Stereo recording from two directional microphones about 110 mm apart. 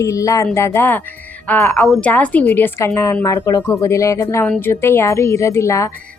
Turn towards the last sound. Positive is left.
turn(degrees=25)  # may be behind; listen again after turning